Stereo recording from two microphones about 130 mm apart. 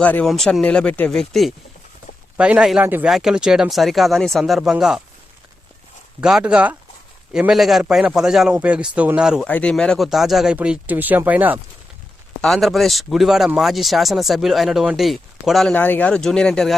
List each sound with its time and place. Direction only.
0.0 s a man's voice: 10° left (ahead or behind); by 3.1 s 15° right (ahead or behind)
3.1 s speech: 5° right (ahead or behind)
6.2 s a man's voice: 5° right (ahead or behind)
9.4 s speech: 10° left (ahead or behind); by 11.6 s 15° right (ahead or behind)
12.4 s speech: centre (ahead or behind)
15.7 s speech: 15° left (ahead or behind)